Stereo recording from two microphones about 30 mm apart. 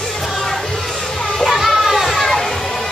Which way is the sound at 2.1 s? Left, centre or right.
Centre.